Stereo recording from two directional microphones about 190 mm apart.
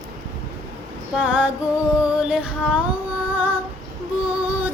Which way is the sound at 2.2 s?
5° right (ahead or behind).